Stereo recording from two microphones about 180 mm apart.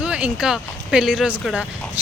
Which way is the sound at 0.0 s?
5° right (ahead or behind).